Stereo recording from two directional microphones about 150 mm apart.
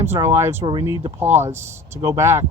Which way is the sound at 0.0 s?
15° right (ahead or behind).